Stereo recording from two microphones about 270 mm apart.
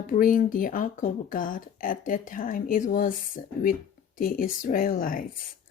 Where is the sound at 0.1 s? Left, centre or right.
Left.